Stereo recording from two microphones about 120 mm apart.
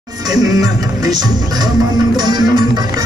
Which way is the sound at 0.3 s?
30° right (ahead or behind).